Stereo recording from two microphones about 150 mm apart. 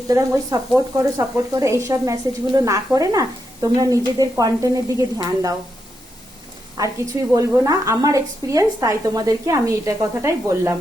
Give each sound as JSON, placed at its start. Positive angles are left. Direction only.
{"t": 0.9, "sound": "speech", "side_deg": -25}
{"t": 6.7, "sound": "speech", "side_deg": -20}